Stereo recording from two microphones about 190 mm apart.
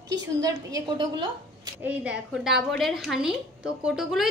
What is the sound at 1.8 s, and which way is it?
A woman's voice, 5° right (ahead or behind).